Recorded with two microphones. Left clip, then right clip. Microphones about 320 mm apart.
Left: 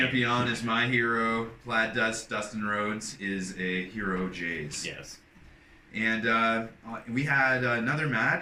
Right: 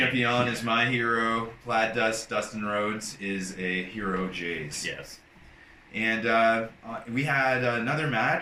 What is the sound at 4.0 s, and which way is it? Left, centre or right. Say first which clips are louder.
Speech: right 1 dB; right.